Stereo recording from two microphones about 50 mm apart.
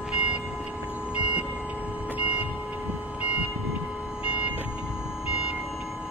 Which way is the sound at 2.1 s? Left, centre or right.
Right.